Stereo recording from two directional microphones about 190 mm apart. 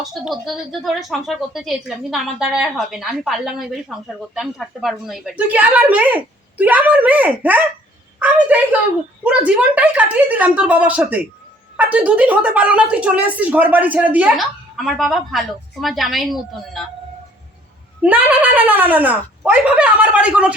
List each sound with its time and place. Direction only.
0.0 s a woman's voice: centre (ahead or behind)
8.2 s a sound: 5° right (ahead or behind)
9.2 s a woman's voice: 5° right (ahead or behind)
18.0 s a woman's voice: 10° right (ahead or behind)